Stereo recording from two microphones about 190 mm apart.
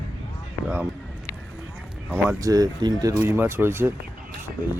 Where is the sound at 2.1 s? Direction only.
15° right (ahead or behind).